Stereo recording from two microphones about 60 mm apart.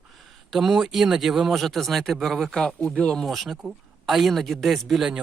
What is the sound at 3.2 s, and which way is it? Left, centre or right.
Speech, centre.